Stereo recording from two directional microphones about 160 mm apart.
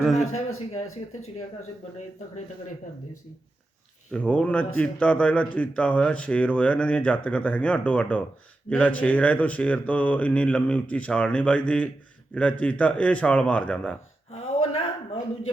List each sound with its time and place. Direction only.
0.2 s speech: 45° left (ahead or behind)
4.1 s a man's voice: 5° left (ahead or behind)
14.3 s a sound: 40° left (ahead or behind)